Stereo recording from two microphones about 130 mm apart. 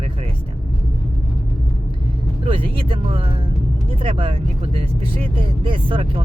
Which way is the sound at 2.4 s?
45° right (ahead or behind).